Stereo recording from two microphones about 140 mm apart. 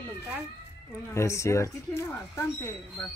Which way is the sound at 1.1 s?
20° left (ahead or behind).